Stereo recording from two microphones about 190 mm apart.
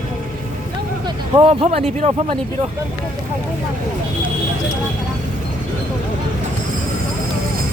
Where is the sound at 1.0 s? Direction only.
25° right (ahead or behind).